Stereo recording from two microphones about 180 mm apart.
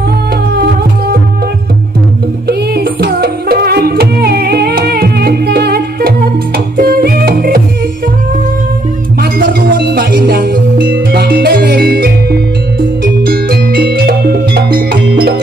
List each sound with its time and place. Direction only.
0.6 s music: 60° right (ahead or behind)
2.4 s music: 60° right (ahead or behind)
9.2 s music: 55° right (ahead or behind)